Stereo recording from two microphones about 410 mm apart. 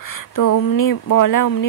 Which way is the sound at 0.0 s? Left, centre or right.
Left.